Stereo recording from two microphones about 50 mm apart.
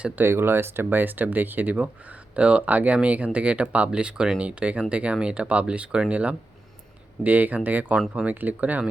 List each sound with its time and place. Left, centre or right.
0.3 s speech: right